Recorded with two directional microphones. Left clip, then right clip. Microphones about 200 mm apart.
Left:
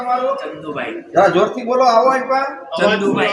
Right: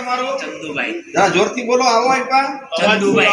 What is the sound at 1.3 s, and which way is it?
A man's voice, 15° left (ahead or behind).